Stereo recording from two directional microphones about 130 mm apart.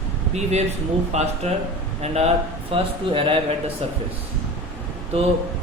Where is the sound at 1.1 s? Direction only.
55° right (ahead or behind).